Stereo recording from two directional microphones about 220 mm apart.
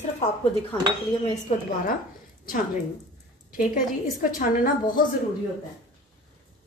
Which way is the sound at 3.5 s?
40° left (ahead or behind).